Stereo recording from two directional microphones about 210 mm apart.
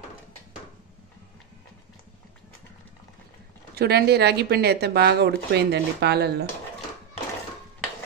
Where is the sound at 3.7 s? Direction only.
50° right (ahead or behind).